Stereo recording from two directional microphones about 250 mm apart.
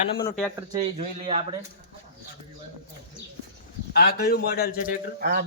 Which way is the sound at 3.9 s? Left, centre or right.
Left.